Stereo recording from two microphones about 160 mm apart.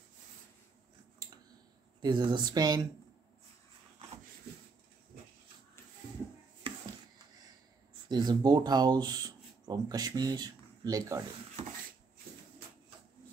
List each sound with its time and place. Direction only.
2.0 s speech: 25° right (ahead or behind)
6.7 s a sound: 35° right (ahead or behind)
8.1 s speech: 25° right (ahead or behind)